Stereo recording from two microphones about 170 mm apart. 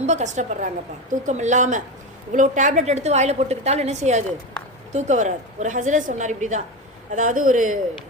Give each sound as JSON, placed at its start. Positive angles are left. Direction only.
{"t": 0.0, "sound": "a woman's voice", "side_deg": -45}